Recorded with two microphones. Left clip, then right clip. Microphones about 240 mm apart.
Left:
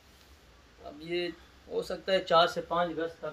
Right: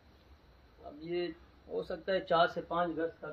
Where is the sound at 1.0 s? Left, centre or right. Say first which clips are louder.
Left 3 dB; centre.